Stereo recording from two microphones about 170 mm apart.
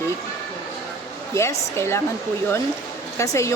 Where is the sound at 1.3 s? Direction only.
15° left (ahead or behind).